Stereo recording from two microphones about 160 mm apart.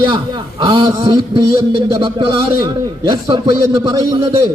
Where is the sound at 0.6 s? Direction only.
30° right (ahead or behind).